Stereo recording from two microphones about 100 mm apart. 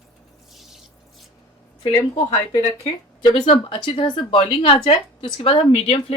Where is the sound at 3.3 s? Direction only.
60° left (ahead or behind).